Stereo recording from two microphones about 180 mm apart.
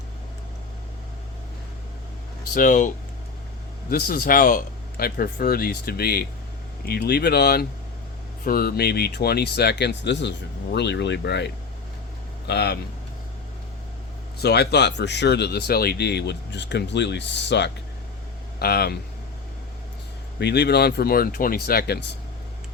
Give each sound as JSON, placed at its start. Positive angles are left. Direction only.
{"t": 2.6, "sound": "speech", "side_deg": 45}
{"t": 3.8, "sound": "speech", "side_deg": 60}
{"t": 14.3, "sound": "speech", "side_deg": 65}
{"t": 18.6, "sound": "speech", "side_deg": 60}
{"t": 20.4, "sound": "speech", "side_deg": 70}